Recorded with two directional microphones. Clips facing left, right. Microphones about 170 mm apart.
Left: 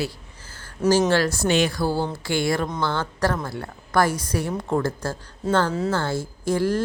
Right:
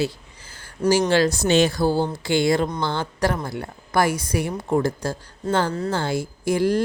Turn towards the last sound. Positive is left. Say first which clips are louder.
# right 2 dB
turn(degrees=-15)  # may be behind; listen again after turning